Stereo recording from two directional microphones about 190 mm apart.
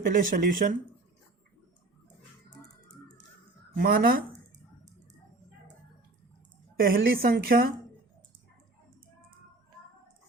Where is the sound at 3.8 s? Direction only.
50° right (ahead or behind).